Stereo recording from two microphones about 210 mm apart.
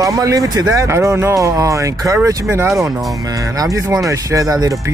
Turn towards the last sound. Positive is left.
turn(degrees=-15)  # may be behind; listen again after turning